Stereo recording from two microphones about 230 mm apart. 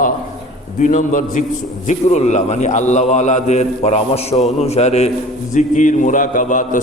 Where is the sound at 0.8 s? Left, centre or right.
Left.